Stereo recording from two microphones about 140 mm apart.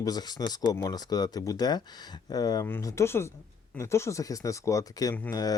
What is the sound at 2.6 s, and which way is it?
Speech, 15° left (ahead or behind).